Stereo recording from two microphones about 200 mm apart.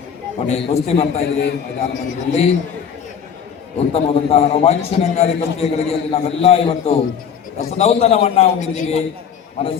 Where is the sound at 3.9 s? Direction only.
30° left (ahead or behind).